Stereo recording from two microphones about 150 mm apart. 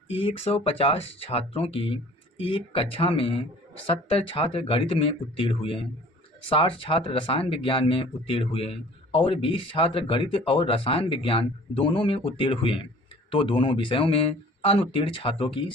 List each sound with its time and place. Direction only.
0.2 s speech: 40° left (ahead or behind)